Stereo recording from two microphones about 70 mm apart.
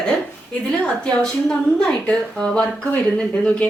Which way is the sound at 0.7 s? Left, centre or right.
Centre.